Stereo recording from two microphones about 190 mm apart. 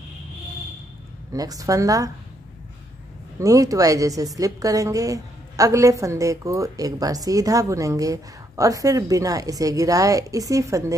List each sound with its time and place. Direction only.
1.3 s a woman's voice: 20° right (ahead or behind)
3.3 s a woman's voice: 15° right (ahead or behind)